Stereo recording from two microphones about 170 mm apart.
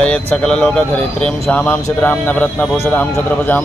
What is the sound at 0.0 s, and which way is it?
Speech, 5° left (ahead or behind).